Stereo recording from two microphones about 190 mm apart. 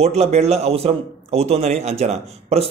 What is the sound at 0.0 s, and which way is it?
A man's voice, 35° right (ahead or behind).